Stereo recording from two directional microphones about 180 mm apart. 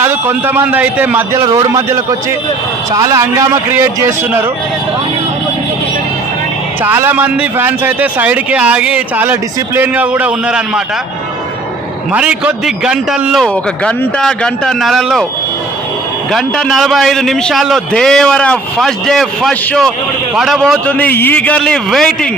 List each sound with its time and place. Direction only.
0.0 s a man's voice: 10° right (ahead or behind)
6.8 s a man's voice: 10° right (ahead or behind)
12.1 s a man's voice: 5° right (ahead or behind)
16.3 s a man's voice: centre (ahead or behind)